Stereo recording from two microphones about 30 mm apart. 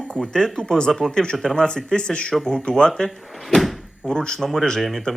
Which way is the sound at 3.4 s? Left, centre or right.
Centre.